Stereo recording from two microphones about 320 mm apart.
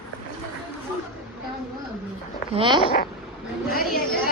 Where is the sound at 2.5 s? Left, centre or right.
Centre.